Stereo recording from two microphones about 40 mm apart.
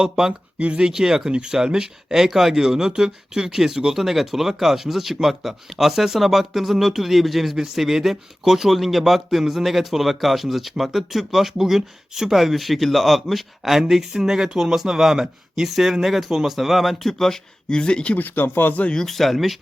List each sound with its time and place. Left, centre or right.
0.0 s speech: centre
17.1 s speech: centre
17.7 s speech: left
18.1 s speech: left
19.0 s speech: centre